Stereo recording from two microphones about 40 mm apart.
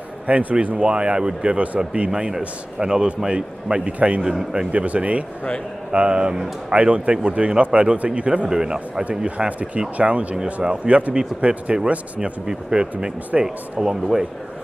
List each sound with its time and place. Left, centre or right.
0.3 s speech: right
0.7 s a man's voice: right
2.0 s a man's voice: centre
8.5 s speech: centre
9.5 s speech: right
10.3 s a man's voice: right